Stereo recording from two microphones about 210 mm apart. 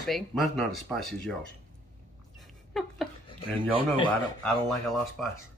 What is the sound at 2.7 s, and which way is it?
Speech, centre (ahead or behind).